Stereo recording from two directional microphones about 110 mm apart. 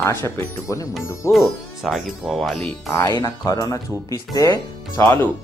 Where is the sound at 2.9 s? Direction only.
25° left (ahead or behind).